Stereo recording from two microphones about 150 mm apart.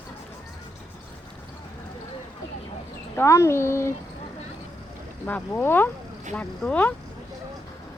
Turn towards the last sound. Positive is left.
turn(degrees=10)  # may be behind; listen again after turning